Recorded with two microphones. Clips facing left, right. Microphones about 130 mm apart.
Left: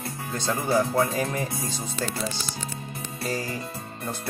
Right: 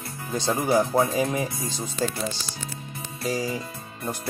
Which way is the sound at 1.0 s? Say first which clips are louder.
Right 2 dB; 20° right (ahead or behind).